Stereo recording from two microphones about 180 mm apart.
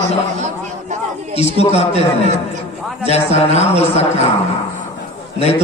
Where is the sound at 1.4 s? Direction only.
35° left (ahead or behind).